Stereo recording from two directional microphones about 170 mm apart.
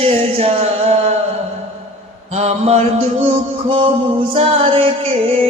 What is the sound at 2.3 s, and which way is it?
Music, 40° right (ahead or behind).